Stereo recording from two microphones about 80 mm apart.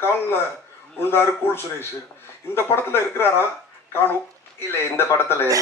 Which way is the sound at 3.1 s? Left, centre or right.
Left.